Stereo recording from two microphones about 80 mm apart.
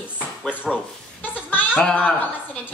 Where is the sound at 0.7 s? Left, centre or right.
Centre.